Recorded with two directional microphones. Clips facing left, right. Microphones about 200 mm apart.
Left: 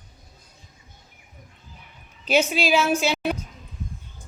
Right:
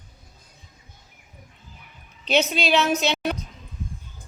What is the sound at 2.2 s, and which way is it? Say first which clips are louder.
A woman's voice: left 1 dB; 10° left (ahead or behind).